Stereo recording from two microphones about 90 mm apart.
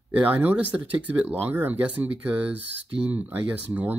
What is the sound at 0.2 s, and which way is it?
Speech, 20° right (ahead or behind).